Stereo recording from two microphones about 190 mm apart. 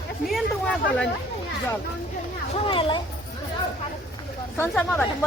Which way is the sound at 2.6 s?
25° left (ahead or behind).